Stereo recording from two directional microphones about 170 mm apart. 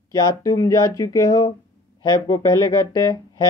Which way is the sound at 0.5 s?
20° left (ahead or behind).